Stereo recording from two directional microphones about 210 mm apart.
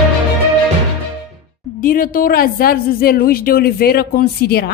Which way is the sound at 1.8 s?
40° left (ahead or behind).